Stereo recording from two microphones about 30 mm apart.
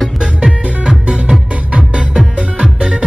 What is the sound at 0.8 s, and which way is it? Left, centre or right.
Music, right.